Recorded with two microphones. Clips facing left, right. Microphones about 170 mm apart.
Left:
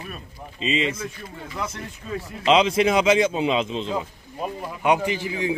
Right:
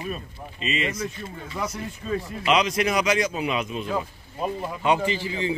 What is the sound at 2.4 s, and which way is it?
Speech, 25° left (ahead or behind).